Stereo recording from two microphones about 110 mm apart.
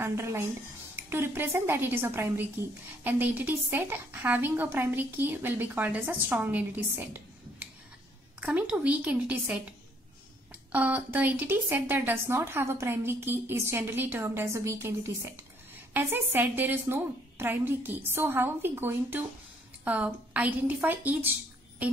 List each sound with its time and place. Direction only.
0.0 s a woman's voice: 25° right (ahead or behind)
8.4 s a woman's voice: 10° right (ahead or behind)
10.7 s a woman's voice: 15° right (ahead or behind)
21.8 s music: 15° right (ahead or behind)